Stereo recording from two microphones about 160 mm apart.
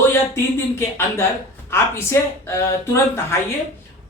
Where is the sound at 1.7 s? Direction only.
15° left (ahead or behind).